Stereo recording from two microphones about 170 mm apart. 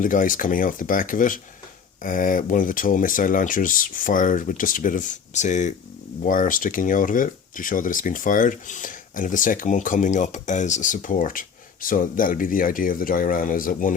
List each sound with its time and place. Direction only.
0.0 s speech: 50° left (ahead or behind)